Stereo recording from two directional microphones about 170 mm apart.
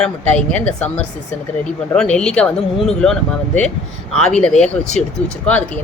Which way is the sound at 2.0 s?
5° left (ahead or behind).